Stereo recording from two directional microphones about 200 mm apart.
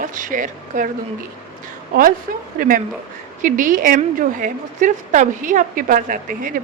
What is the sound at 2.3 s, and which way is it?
A man's voice, 45° right (ahead or behind).